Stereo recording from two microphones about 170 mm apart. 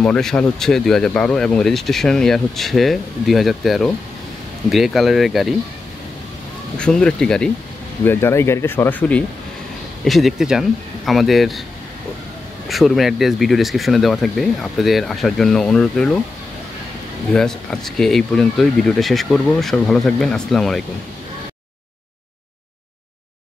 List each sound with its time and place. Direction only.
0.0 s speech: 5° left (ahead or behind)
6.8 s speech: 5° left (ahead or behind)
10.0 s speech: centre (ahead or behind)
12.6 s speech: centre (ahead or behind)
17.3 s speech: 5° left (ahead or behind)